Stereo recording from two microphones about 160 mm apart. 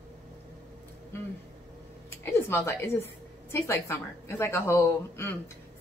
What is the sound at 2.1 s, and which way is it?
A woman's voice, 15° left (ahead or behind).